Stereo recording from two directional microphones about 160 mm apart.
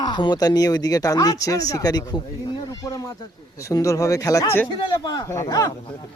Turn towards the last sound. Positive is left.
turn(degrees=20)  # may be behind; listen again after turning